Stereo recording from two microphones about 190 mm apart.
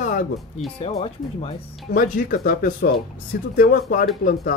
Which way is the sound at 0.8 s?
25° left (ahead or behind).